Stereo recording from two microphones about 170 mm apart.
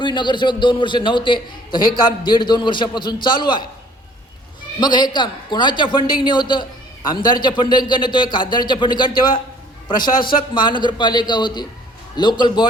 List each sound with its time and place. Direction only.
0.0 s a man's voice: 25° left (ahead or behind)
4.8 s a man's voice: 25° left (ahead or behind)
10.5 s a man's voice: 25° left (ahead or behind)